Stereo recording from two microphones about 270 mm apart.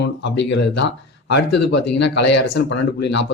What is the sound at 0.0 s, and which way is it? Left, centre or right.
Speech, left.